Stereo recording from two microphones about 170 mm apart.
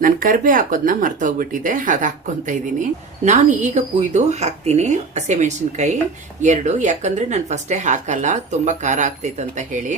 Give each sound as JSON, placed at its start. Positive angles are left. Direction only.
{"t": 0.0, "sound": "speech", "side_deg": -55}